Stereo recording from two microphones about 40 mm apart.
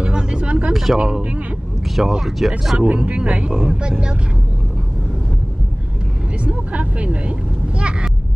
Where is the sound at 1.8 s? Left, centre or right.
Centre.